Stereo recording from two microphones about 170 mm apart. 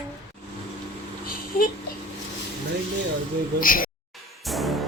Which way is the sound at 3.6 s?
55° left (ahead or behind).